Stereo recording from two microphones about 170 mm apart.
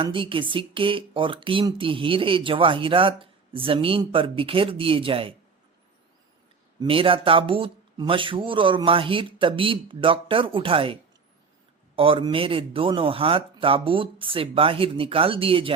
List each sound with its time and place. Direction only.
0.0 s speech: 30° right (ahead or behind)
6.7 s speech: 30° right (ahead or behind)
11.9 s speech: 30° right (ahead or behind)